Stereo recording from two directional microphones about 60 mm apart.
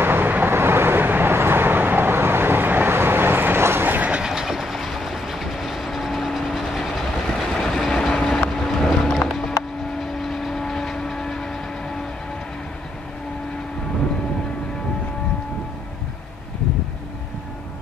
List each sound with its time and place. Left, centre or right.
0.0 s vehicle: right
4.1 s train: centre
9.6 s vehicle: centre